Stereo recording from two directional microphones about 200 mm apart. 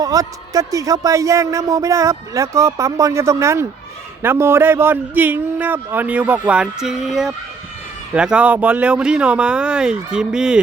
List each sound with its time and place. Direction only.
0.0 s speech: 15° right (ahead or behind)